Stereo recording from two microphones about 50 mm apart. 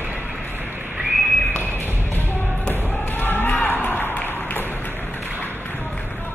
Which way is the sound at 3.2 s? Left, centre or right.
Left.